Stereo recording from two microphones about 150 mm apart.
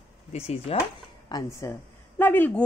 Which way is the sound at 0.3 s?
45° left (ahead or behind).